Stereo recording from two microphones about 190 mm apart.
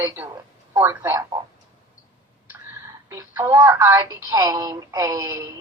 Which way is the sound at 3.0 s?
15° right (ahead or behind).